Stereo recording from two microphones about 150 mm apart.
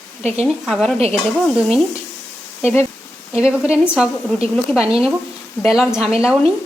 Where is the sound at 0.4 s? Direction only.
5° right (ahead or behind).